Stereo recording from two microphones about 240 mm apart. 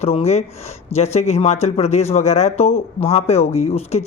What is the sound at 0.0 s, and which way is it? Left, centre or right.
Speech, left.